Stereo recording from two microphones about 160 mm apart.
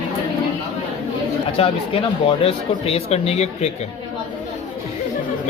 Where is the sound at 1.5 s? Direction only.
35° left (ahead or behind).